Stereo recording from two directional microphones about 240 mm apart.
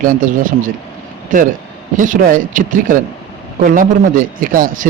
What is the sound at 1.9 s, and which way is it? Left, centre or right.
Speech, right.